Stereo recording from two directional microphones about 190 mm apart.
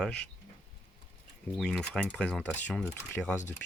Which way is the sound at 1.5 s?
5° left (ahead or behind).